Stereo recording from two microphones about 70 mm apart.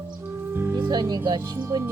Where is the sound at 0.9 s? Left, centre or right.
Right.